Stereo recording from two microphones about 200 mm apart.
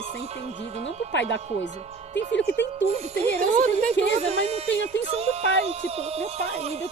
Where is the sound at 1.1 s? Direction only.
65° left (ahead or behind).